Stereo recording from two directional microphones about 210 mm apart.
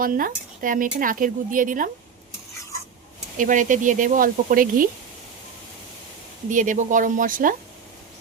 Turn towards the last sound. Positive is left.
turn(degrees=-40)  # may be behind; listen again after turning